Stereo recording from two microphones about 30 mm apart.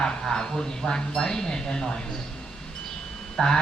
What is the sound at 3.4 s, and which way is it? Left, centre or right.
Speech, left.